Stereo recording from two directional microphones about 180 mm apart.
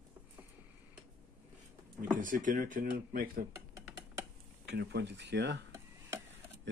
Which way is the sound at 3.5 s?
20° right (ahead or behind).